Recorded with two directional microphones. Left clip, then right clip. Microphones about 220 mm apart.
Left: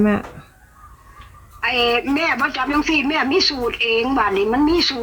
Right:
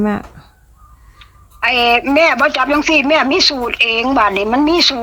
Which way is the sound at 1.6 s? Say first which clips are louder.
Right 6 dB; 50° right (ahead or behind).